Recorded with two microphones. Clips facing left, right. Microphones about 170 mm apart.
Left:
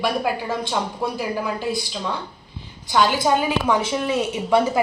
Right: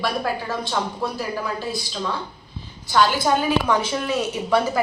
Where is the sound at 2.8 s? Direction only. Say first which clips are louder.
Even; 15° left (ahead or behind).